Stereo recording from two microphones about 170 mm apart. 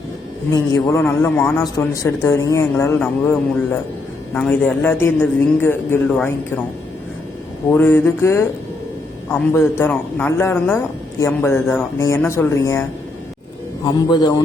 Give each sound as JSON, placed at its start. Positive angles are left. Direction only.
{"t": 0.5, "sound": "a man's voice", "side_deg": 20}
{"t": 7.7, "sound": "a man's voice", "side_deg": 10}
{"t": 13.8, "sound": "a man's voice", "side_deg": 25}